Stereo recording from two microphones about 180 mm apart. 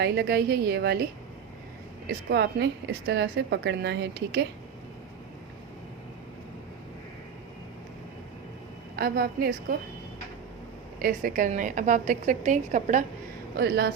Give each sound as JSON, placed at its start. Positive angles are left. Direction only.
{"t": 0.0, "sound": "a woman's voice", "side_deg": -60}
{"t": 2.3, "sound": "a woman's voice", "side_deg": -70}
{"t": 9.0, "sound": "a woman's voice", "side_deg": -60}
{"t": 11.0, "sound": "a woman's voice", "side_deg": -50}
{"t": 13.6, "sound": "a woman's voice", "side_deg": -65}